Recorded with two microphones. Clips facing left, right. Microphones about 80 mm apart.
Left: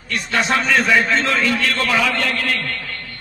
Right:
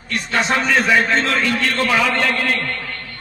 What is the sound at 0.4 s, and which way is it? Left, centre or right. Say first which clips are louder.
A man's voice: even; centre.